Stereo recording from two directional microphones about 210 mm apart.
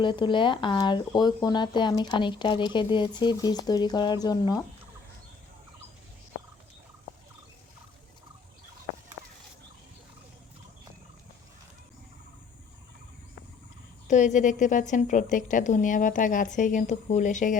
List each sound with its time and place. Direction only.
0.0 s speech: 20° left (ahead or behind)
14.1 s a woman's voice: 35° left (ahead or behind)